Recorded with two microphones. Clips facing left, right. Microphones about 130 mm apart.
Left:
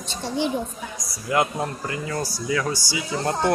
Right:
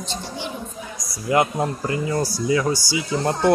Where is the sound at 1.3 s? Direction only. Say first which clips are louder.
Right 3 dB; 20° right (ahead or behind).